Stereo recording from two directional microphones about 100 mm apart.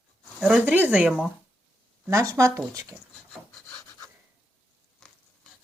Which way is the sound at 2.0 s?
30° right (ahead or behind).